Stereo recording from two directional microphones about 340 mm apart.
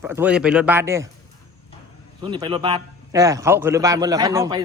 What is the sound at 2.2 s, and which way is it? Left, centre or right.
A man's voice, centre.